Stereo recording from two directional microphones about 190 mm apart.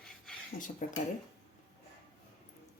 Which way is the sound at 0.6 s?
40° left (ahead or behind).